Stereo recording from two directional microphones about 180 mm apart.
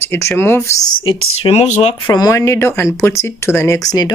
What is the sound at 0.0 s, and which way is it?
Speech, 15° left (ahead or behind).